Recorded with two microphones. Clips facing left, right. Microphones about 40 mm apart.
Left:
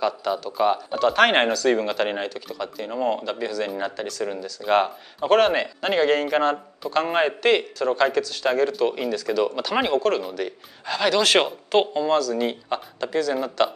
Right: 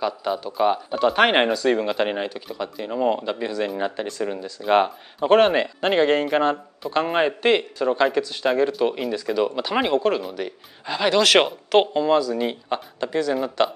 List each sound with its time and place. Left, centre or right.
0.2 s speech: centre
4.6 s speech: centre
13.0 s speech: right
13.3 s speech: centre